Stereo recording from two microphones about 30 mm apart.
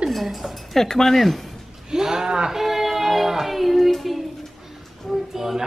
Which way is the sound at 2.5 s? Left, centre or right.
Centre.